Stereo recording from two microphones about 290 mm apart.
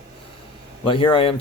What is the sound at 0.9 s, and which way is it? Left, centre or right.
Speech, centre.